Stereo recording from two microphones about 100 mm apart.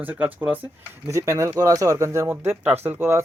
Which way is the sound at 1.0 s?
30° right (ahead or behind).